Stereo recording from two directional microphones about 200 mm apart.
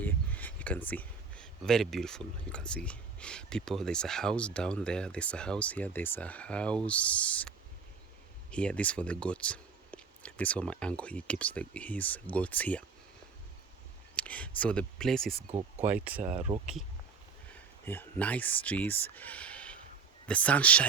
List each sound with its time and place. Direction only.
0.0 s speech: 10° left (ahead or behind)
14.2 s speech: 5° left (ahead or behind)
16.2 s speech: 35° right (ahead or behind)
17.5 s speech: 10° left (ahead or behind)